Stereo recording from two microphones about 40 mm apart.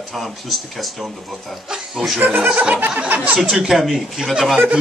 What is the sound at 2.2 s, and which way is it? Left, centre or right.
Speech, right.